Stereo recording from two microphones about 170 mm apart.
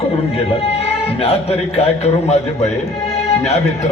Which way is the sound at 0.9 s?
35° left (ahead or behind).